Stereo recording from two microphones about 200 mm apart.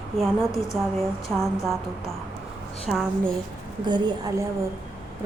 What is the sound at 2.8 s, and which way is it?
Speech, centre (ahead or behind).